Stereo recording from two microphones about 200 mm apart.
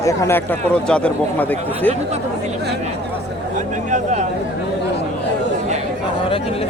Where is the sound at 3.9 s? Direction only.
35° right (ahead or behind).